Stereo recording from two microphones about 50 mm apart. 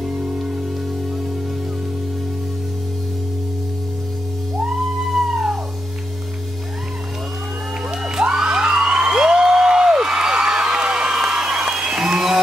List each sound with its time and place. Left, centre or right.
0.0 s music: right
5.1 s music: centre
7.9 s a sound: centre